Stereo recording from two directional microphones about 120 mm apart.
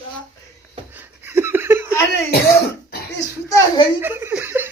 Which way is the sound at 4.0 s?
15° right (ahead or behind).